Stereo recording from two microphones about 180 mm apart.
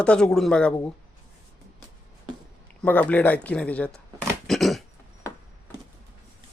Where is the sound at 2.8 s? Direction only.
10° left (ahead or behind).